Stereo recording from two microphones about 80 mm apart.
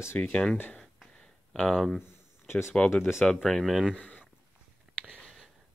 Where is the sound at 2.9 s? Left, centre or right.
Left.